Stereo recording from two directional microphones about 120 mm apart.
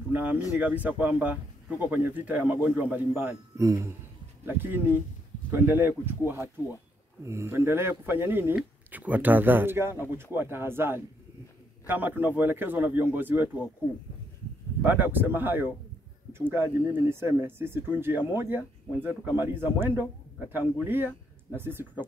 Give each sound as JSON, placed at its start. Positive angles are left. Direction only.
{"t": 0.1, "sound": "a man's voice", "side_deg": -15}
{"t": 3.5, "sound": "a man's voice", "side_deg": -25}
{"t": 14.8, "sound": "a man's voice", "side_deg": -15}